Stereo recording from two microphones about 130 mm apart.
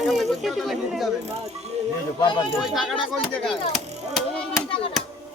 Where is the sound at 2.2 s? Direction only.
40° left (ahead or behind).